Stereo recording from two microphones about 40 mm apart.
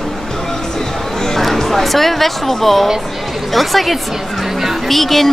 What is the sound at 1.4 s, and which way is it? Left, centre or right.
Music, centre.